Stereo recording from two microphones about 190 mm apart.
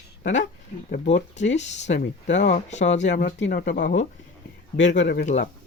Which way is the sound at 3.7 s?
70° left (ahead or behind).